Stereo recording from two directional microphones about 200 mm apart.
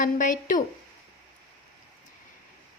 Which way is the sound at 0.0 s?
40° left (ahead or behind).